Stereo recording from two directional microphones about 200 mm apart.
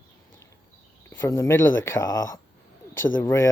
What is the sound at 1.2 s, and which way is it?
Speech, 10° left (ahead or behind).